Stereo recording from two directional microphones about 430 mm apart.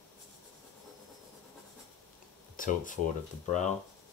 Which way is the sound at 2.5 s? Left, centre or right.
Centre.